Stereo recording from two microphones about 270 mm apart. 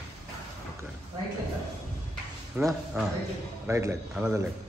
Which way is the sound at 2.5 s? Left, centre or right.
Centre.